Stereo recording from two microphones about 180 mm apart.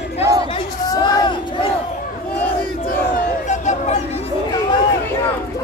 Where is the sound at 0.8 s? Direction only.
25° left (ahead or behind).